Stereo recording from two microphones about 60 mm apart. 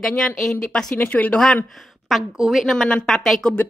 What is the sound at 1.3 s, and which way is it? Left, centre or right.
Speech, centre.